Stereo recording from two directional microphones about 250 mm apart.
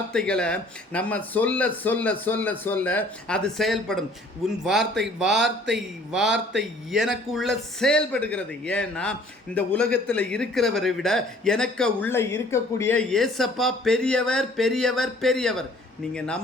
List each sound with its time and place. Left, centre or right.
0.1 s a man's voice: centre
6.3 s a man's voice: right
6.9 s a man's voice: centre